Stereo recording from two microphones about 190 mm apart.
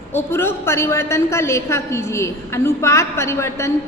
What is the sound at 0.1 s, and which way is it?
A woman's voice, 10° left (ahead or behind).